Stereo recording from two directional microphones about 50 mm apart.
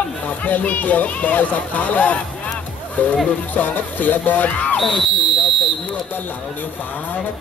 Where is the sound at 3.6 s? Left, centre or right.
Left.